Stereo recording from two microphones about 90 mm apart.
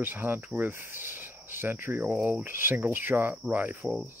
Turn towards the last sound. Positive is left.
turn(degrees=-20)  # may be behind; listen again after turning